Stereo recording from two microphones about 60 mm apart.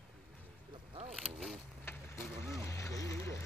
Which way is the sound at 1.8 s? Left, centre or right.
Left.